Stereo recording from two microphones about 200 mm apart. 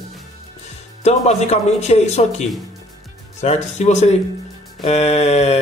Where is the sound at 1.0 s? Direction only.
35° left (ahead or behind).